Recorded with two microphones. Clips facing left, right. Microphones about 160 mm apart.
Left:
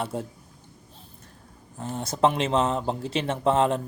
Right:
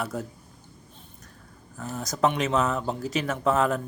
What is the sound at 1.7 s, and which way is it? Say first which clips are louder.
Speech: left 2 dB; 30° left (ahead or behind).